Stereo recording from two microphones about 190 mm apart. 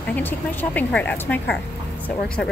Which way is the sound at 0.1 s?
10° left (ahead or behind).